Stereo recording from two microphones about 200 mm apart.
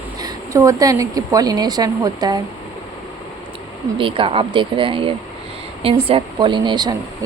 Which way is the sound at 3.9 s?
25° right (ahead or behind).